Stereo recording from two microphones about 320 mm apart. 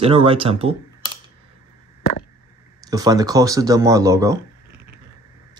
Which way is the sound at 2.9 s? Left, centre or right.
Centre.